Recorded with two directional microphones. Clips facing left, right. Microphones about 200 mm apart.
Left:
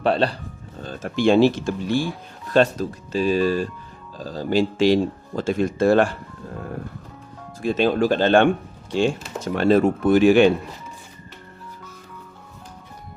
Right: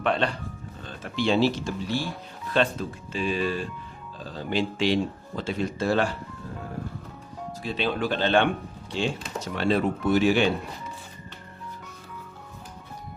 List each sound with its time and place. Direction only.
0.0 s speech: 35° left (ahead or behind); by 6.1 s 50° left (ahead or behind)
7.6 s speech: 45° left (ahead or behind)